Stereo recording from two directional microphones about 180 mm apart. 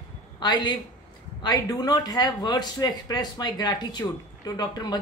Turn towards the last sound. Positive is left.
turn(degrees=20)  # may be behind; listen again after turning